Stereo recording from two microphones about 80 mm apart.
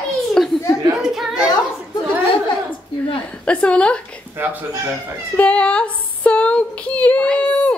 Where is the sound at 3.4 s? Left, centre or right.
Centre.